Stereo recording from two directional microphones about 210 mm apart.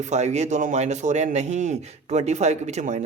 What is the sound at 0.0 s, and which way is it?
A man's voice, 35° right (ahead or behind).